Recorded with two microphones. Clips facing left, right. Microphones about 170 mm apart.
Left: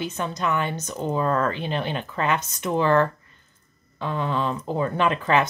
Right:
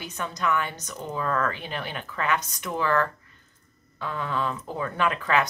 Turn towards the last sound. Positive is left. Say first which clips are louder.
# left 3 dB
turn(degrees=25)  # may be behind; listen again after turning